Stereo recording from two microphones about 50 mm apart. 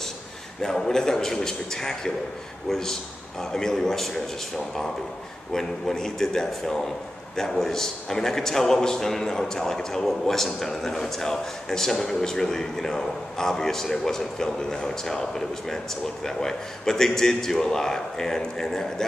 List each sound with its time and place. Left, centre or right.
0.6 s a man's voice: centre
5.5 s a man's voice: centre